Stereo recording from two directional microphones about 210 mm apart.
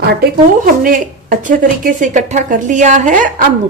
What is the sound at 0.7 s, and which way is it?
Speech, 40° right (ahead or behind).